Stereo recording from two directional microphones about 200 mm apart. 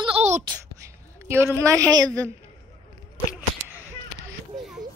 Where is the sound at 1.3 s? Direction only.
10° right (ahead or behind).